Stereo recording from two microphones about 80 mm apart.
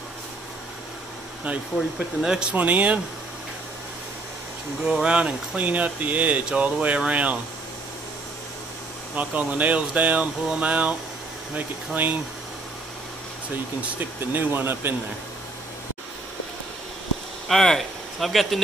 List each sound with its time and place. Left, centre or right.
1.4 s speech: centre
4.8 s speech: centre
9.1 s speech: centre
14.3 s speech: right
17.5 s speech: centre